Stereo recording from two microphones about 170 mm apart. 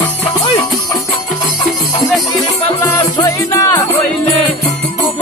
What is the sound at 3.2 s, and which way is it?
Music, 20° left (ahead or behind).